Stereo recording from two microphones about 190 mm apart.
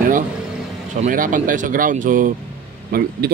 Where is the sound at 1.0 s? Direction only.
45° right (ahead or behind).